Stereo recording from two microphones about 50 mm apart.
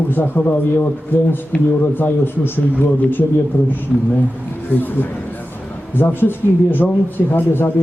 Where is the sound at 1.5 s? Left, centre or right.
Left.